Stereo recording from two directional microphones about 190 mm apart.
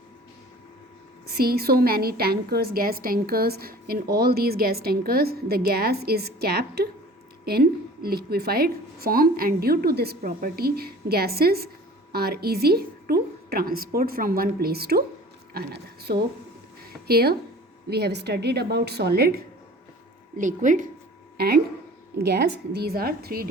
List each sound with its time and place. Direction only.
1.3 s a woman's voice: 55° right (ahead or behind)
20.3 s a woman's voice: 45° right (ahead or behind)
21.3 s a woman's voice: 55° right (ahead or behind)